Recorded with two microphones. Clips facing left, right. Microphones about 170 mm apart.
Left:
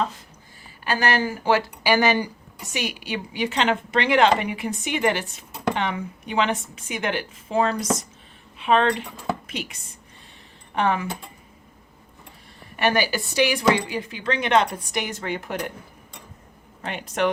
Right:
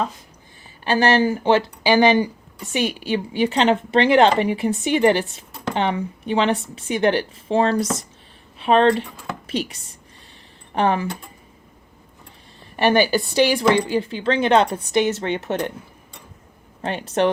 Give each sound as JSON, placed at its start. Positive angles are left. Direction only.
{"t": 0.9, "sound": "a woman's voice", "side_deg": -30}
{"t": 12.7, "sound": "a woman's voice", "side_deg": -30}
{"t": 16.8, "sound": "a woman's voice", "side_deg": -30}